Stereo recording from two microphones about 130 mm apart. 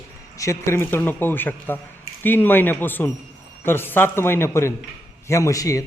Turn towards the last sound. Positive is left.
turn(degrees=25)  # may be behind; listen again after turning